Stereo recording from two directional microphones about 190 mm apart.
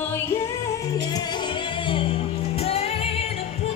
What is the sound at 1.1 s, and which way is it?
Music, 25° left (ahead or behind).